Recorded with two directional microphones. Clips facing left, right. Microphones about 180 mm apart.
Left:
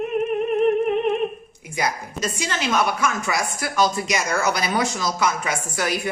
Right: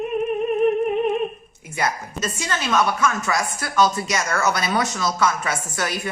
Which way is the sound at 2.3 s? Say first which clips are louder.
Right 1 dB; 15° left (ahead or behind).